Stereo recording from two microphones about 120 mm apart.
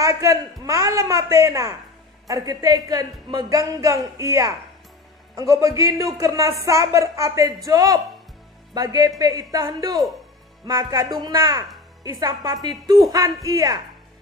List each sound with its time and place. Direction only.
0.0 s a woman's voice: 25° right (ahead or behind)